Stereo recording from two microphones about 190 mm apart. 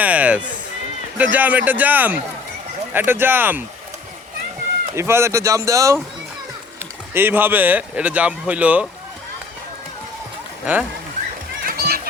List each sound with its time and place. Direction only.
0.0 s a sound: 5° right (ahead or behind)
1.2 s speech: 10° right (ahead or behind)
4.9 s speech: 15° right (ahead or behind)
7.1 s speech: 10° right (ahead or behind)
11.6 s run: 55° right (ahead or behind)